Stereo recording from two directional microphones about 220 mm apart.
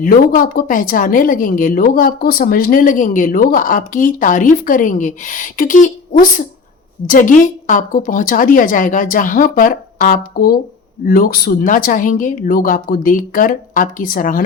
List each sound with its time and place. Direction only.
0.0 s speech: 40° left (ahead or behind)